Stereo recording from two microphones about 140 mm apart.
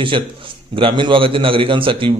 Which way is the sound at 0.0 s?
35° right (ahead or behind).